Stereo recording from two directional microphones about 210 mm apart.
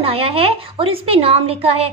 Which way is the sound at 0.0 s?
30° right (ahead or behind).